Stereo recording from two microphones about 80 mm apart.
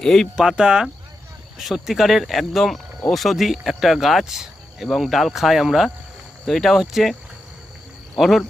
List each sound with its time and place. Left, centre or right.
0.0 s speech: centre
0.3 s speech: centre